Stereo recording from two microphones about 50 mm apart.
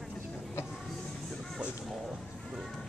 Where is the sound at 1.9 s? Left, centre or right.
Centre.